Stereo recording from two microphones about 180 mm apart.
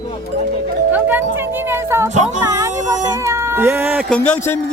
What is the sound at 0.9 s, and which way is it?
Music, 10° right (ahead or behind).